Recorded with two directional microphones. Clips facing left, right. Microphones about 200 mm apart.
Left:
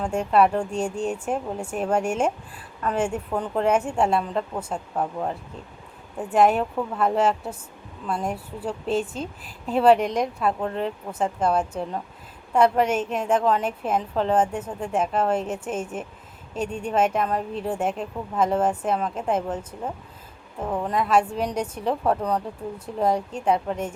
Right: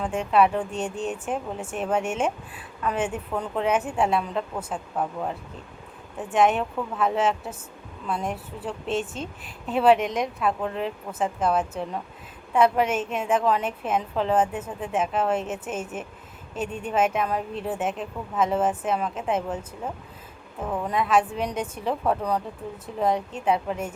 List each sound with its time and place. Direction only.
0.0 s a woman's voice: centre (ahead or behind)
20.7 s a woman's voice: 5° left (ahead or behind)